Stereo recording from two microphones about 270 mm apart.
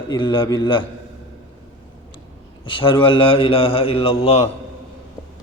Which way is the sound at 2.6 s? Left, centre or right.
Centre.